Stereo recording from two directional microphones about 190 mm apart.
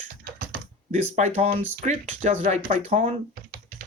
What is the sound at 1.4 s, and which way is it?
Speech, 35° right (ahead or behind).